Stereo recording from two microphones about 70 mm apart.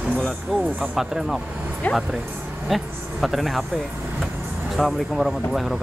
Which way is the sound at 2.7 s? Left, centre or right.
Centre.